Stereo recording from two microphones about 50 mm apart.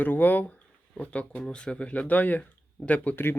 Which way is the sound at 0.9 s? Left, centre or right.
Left.